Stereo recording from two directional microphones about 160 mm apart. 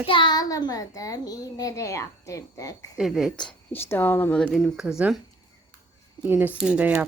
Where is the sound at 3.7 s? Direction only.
15° left (ahead or behind).